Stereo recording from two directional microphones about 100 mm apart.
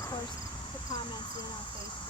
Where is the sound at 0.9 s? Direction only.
45° left (ahead or behind).